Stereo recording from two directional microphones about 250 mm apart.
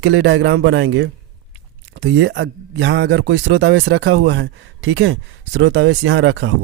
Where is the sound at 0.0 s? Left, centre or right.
Right.